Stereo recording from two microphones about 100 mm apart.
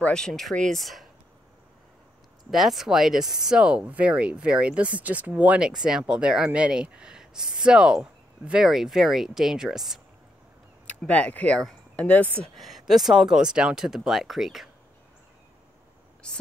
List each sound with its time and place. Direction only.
0.0 s speech: 5° left (ahead or behind)
2.5 s speech: 5° right (ahead or behind)
11.0 s speech: 10° left (ahead or behind)
12.5 s speech: centre (ahead or behind)